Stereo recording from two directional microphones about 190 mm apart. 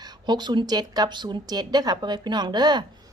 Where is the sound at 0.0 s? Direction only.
20° right (ahead or behind).